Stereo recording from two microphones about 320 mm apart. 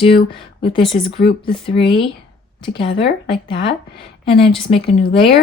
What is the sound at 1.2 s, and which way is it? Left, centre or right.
Speech, left.